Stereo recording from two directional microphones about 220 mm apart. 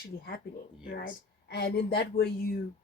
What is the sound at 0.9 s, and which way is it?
A woman's voice, 40° left (ahead or behind).